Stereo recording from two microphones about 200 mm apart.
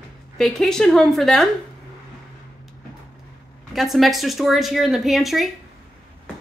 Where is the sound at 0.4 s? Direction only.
Centre (ahead or behind).